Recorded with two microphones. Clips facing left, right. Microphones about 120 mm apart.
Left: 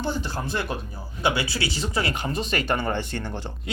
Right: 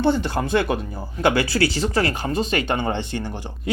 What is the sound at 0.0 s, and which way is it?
Speech, 70° right (ahead or behind).